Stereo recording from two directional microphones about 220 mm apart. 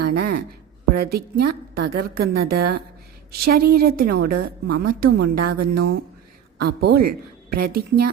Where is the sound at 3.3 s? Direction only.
45° right (ahead or behind).